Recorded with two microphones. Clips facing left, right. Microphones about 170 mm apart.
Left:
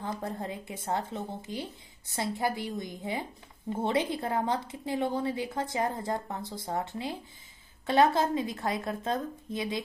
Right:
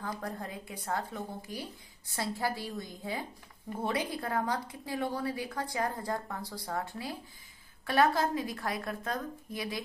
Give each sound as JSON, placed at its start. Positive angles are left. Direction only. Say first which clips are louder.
{"t": 0.0, "sound": "a woman's voice", "louder": "left 3 dB", "side_deg": 25}